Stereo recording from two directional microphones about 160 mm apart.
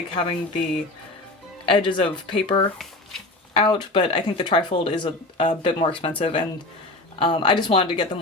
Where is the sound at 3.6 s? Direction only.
35° left (ahead or behind).